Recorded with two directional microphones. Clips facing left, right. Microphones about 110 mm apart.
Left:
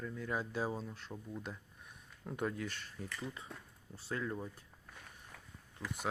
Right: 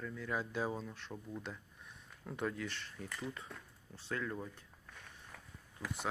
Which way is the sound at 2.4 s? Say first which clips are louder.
Even; 35° left (ahead or behind).